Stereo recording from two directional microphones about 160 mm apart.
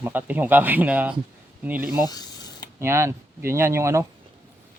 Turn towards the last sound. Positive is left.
turn(degrees=-15)  # may be behind; listen again after turning